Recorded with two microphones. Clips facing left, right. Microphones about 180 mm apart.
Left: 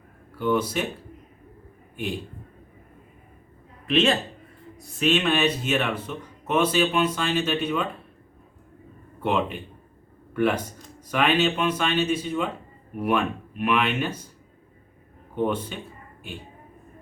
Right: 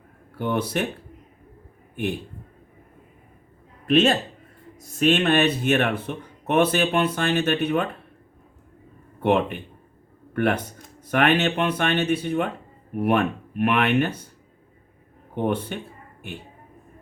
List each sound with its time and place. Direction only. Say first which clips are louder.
0.3 s speech: left 1 dB; 55° right (ahead or behind)
3.8 s speech: right 3 dB; 50° right (ahead or behind)
9.2 s speech: right 4 dB; 55° right (ahead or behind)
15.4 s speech: right 5 dB; 60° right (ahead or behind)